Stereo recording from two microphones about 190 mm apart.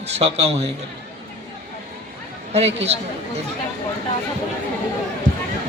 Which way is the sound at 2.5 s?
35° right (ahead or behind).